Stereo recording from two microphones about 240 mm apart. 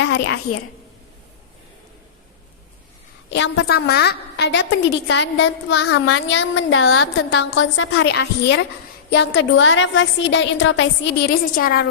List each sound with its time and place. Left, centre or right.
0.0 s a woman's voice: left
3.2 s a woman's voice: left
5.7 s a woman's voice: left